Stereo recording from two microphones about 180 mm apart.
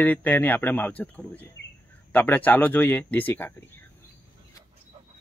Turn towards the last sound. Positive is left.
turn(degrees=10)  # may be behind; listen again after turning